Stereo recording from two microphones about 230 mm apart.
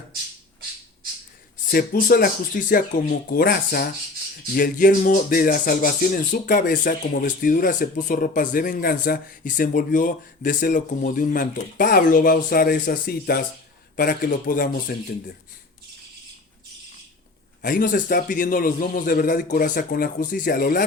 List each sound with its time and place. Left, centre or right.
1.7 s speech: left
17.6 s speech: left